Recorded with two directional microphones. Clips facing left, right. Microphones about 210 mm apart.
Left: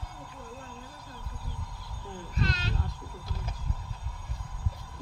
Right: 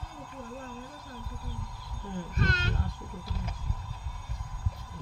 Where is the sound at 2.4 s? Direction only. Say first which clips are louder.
Even; 50° right (ahead or behind).